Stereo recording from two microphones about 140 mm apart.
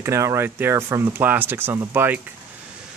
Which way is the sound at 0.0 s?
20° right (ahead or behind).